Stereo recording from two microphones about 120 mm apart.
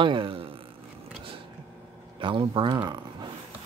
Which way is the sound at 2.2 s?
45° right (ahead or behind).